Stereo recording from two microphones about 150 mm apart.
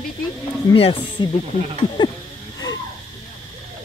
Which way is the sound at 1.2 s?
30° left (ahead or behind).